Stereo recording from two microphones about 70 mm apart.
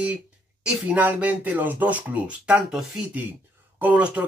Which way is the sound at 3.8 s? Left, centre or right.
Centre.